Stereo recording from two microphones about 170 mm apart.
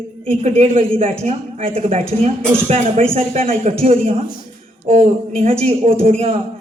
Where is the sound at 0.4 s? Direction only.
35° right (ahead or behind).